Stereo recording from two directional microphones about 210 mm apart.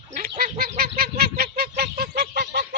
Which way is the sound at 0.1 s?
45° right (ahead or behind).